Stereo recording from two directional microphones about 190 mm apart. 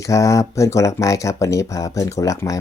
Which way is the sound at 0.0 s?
15° left (ahead or behind).